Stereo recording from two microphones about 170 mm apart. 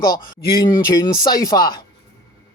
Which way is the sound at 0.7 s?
20° left (ahead or behind).